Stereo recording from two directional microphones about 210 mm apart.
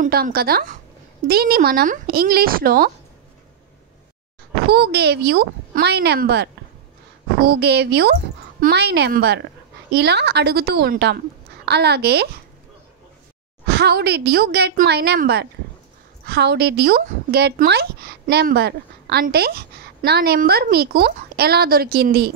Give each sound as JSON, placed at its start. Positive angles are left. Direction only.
{"t": 0.0, "sound": "speech", "side_deg": -45}
{"t": 4.6, "sound": "speech", "side_deg": -50}
{"t": 13.7, "sound": "speech", "side_deg": -50}